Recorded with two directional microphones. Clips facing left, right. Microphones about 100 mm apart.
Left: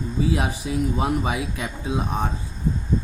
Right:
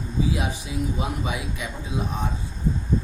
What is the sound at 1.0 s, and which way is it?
A man's voice, 55° left (ahead or behind).